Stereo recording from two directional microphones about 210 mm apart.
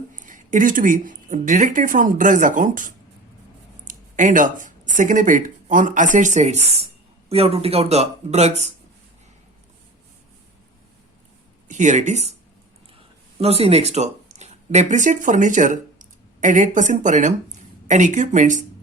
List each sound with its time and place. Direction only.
0.1 s speech: 40° right (ahead or behind)
11.7 s speech: 35° right (ahead or behind)
13.4 s speech: 30° right (ahead or behind)